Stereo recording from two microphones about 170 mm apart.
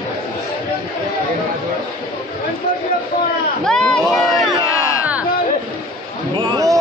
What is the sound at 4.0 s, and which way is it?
Run, 20° left (ahead or behind).